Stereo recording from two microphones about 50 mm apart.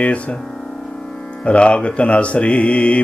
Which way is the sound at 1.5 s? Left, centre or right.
Left.